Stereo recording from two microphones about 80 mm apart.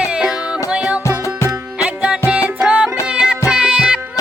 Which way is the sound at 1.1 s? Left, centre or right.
Left.